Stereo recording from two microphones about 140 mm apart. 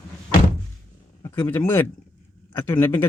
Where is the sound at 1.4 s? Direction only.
15° left (ahead or behind).